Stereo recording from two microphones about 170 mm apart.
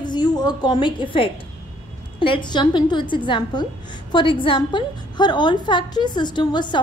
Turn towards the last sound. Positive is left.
turn(degrees=25)  # may be behind; listen again after turning